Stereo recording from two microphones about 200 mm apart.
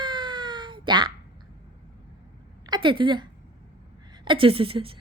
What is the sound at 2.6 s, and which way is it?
A woman's voice, 25° right (ahead or behind).